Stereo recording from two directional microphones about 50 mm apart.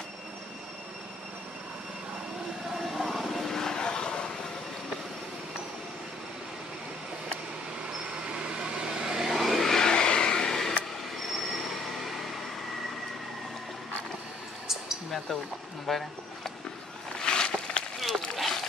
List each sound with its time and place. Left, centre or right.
2.7 s vehicle: centre
8.3 s vehicle: centre
11.3 s train: centre
15.9 s speech: centre
17.2 s a sound: centre
18.3 s a sound: centre